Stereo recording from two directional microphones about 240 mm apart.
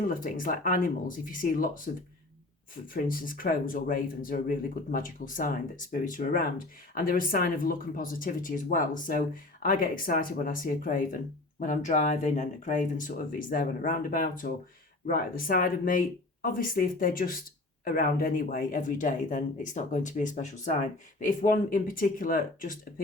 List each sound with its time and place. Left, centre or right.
0.1 s speech: left
2.9 s speech: left